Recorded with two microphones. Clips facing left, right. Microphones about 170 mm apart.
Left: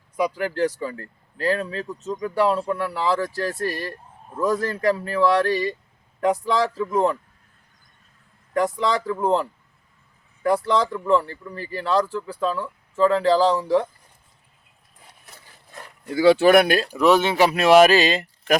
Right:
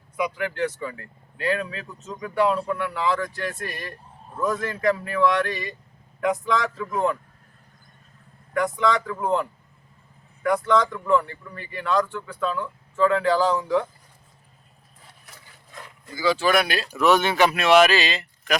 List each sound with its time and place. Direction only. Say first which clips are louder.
0.2 s speech: left 3 dB; 35° left (ahead or behind)
8.5 s speech: left 1 dB; 35° left (ahead or behind)
16.1 s speech: left 7 dB; 65° left (ahead or behind); by 16.9 s 45° left (ahead or behind)
16.9 s speech: even; 30° left (ahead or behind); by 18.5 s 45° left (ahead or behind)